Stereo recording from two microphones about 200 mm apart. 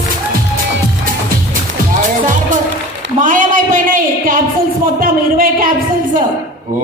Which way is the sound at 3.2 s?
40° right (ahead or behind).